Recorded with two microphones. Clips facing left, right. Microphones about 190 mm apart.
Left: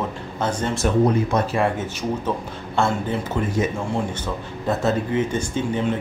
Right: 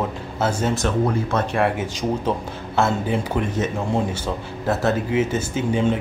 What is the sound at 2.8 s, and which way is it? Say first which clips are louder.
Speech: right 1 dB; centre (ahead or behind).